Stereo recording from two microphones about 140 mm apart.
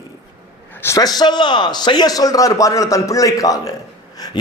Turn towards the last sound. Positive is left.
turn(degrees=25)  # may be behind; listen again after turning